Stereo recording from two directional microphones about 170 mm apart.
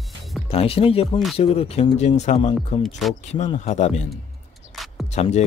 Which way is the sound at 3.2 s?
40° left (ahead or behind).